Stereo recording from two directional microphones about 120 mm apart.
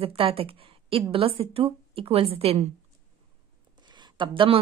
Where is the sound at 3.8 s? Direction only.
40° right (ahead or behind).